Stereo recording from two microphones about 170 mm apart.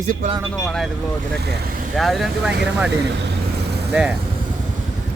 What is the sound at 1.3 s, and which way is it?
Speech, 75° right (ahead or behind).